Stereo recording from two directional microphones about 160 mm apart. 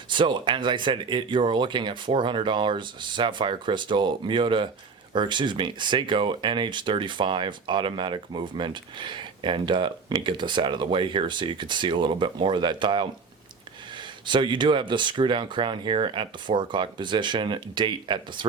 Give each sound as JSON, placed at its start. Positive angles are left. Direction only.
{"t": 0.1, "sound": "speech", "side_deg": -30}